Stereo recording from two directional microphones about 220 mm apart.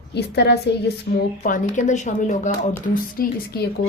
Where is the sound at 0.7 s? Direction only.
50° left (ahead or behind).